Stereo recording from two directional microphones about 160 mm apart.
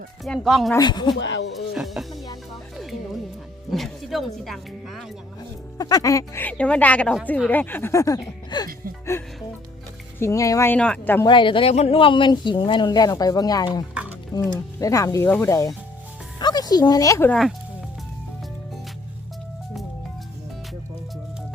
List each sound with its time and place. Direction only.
0.3 s speech: centre (ahead or behind)
0.8 s speech: 30° left (ahead or behind)
1.1 s speech: 90° left
1.7 s speech: centre (ahead or behind)
3.7 s music: centre (ahead or behind)
4.4 s speech: centre (ahead or behind)
5.7 s speech: 20° left (ahead or behind)
8.4 s music: 25° left (ahead or behind)
10.2 s speech: 20° left (ahead or behind)
11.3 s speech: 30° left (ahead or behind)